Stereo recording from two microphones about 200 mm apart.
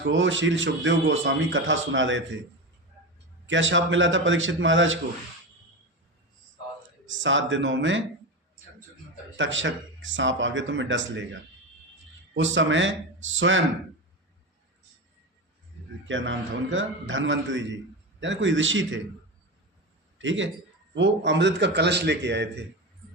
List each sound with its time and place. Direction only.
0.0 s speech: 65° right (ahead or behind)
3.4 s speech: 70° right (ahead or behind)
7.1 s speech: 70° right (ahead or behind)
9.4 s speech: 70° right (ahead or behind)
12.3 s speech: 70° right (ahead or behind)
16.0 s speech: 70° right (ahead or behind)
20.1 s a man's voice: 70° right (ahead or behind)